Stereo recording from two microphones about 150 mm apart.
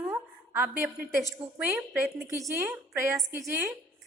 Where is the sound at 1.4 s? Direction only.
35° right (ahead or behind).